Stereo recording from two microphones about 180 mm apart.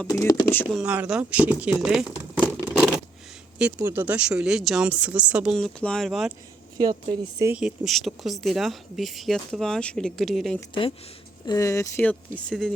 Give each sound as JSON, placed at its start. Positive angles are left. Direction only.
{"t": 0.1, "sound": "speech", "side_deg": 20}
{"t": 0.7, "sound": "speech", "side_deg": -5}
{"t": 2.6, "sound": "scissors", "side_deg": -5}
{"t": 3.6, "sound": "speech", "side_deg": -10}
{"t": 5.5, "sound": "speech", "side_deg": 5}
{"t": 6.7, "sound": "speech", "side_deg": -20}
{"t": 7.5, "sound": "speech", "side_deg": 0}
{"t": 11.4, "sound": "speech", "side_deg": 20}